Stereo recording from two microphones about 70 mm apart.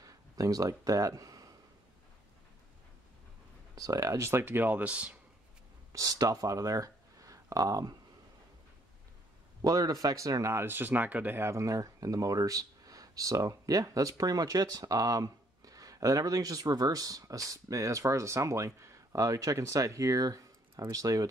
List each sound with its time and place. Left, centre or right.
0.0 s speech: right
3.7 s speech: right; by 5.1 s centre
5.9 s speech: right
9.6 s a man's voice: right
10.6 s speech: right
11.4 s speech: right